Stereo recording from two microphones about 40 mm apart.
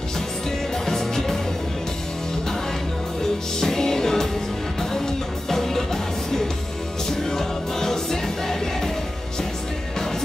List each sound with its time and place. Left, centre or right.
0.8 s music: centre
3.5 s music: centre
7.1 s music: centre